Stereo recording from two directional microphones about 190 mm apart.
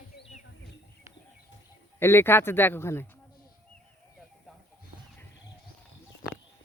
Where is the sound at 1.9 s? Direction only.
10° left (ahead or behind).